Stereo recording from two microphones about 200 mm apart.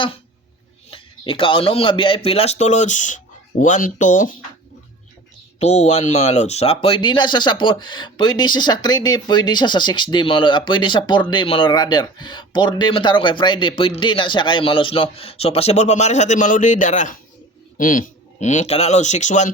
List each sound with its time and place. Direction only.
0.9 s speech: 25° left (ahead or behind)
5.5 s speech: 35° left (ahead or behind)